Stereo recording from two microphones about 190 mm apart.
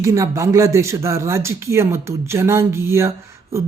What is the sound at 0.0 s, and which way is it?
Speech, 15° right (ahead or behind).